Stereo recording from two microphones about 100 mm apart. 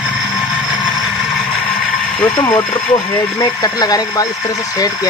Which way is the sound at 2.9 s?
40° left (ahead or behind).